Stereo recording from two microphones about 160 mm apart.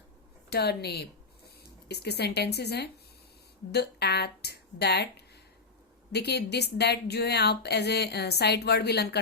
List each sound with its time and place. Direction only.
0.5 s speech: 90° left